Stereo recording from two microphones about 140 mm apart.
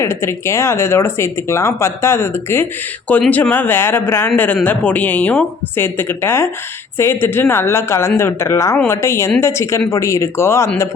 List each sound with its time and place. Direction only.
0.0 s a woman's voice: 20° left (ahead or behind)